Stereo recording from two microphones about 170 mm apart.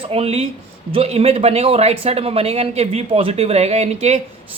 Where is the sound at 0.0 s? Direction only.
35° right (ahead or behind).